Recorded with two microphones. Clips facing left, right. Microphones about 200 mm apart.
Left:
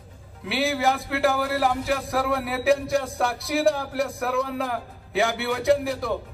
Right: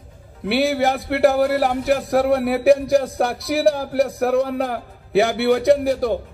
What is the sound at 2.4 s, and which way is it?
Speech, 65° right (ahead or behind).